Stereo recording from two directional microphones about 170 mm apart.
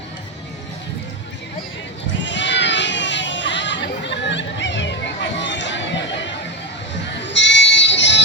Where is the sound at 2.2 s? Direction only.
90° left.